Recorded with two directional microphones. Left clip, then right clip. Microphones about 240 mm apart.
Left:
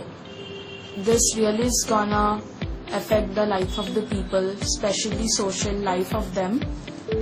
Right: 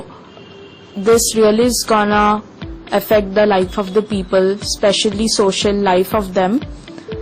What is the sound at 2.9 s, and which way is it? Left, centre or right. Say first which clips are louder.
Speech: right 9 dB; right.